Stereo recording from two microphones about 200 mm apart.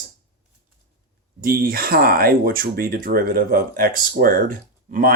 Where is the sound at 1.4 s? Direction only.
45° right (ahead or behind).